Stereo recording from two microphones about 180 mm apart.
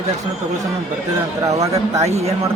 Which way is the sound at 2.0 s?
35° right (ahead or behind).